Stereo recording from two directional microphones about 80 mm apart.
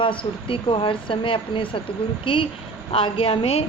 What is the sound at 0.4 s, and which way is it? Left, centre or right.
Speech, left.